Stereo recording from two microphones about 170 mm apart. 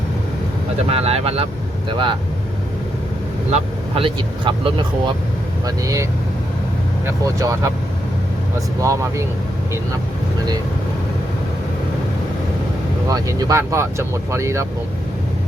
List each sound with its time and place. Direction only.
0.9 s speech: 35° right (ahead or behind)
3.5 s speech: 35° right (ahead or behind)
8.8 s speech: 15° right (ahead or behind)
13.1 s speech: 20° right (ahead or behind)